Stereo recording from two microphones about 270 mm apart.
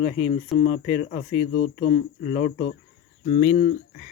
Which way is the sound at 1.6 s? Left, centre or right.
Left.